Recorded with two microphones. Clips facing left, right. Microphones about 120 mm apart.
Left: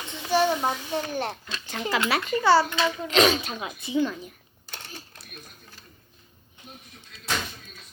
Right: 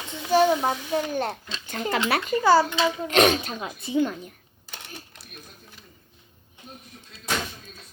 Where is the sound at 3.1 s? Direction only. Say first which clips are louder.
Right 1 dB; 55° right (ahead or behind).